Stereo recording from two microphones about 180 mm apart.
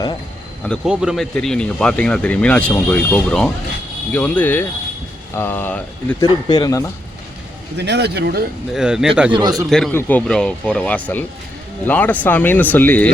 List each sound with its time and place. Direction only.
0.9 s speech: centre (ahead or behind)
6.2 s speech: 25° left (ahead or behind)
7.8 s speech: 70° right (ahead or behind)
8.7 s speech: 5° right (ahead or behind)
9.3 s speech: 20° right (ahead or behind)
9.6 s speech: 5° left (ahead or behind)